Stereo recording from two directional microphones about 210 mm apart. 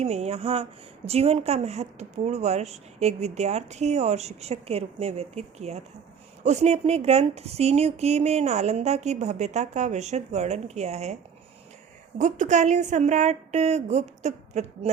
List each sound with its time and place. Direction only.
0.0 s speech: 30° right (ahead or behind)